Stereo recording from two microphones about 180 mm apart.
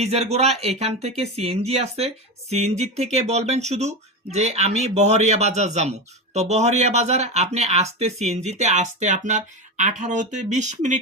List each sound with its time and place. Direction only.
0.0 s speech: 35° right (ahead or behind)